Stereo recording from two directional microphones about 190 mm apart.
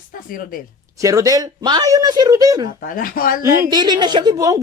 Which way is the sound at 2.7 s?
45° left (ahead or behind).